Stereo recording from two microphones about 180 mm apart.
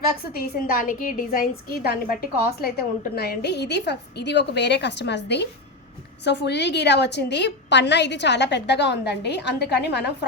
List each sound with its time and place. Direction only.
0.3 s a woman's voice: 55° left (ahead or behind)